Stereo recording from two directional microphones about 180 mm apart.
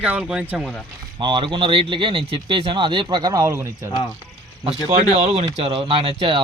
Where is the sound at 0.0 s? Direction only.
5° right (ahead or behind).